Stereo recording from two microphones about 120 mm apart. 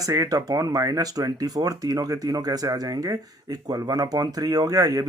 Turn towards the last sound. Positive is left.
turn(degrees=-30)  # may be behind; listen again after turning